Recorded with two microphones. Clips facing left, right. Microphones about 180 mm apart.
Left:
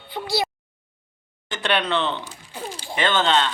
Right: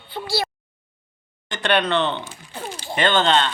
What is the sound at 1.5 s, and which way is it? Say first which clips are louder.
Speech: right 3 dB; 5° left (ahead or behind).